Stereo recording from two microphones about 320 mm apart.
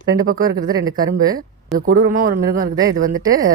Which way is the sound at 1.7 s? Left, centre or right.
Right.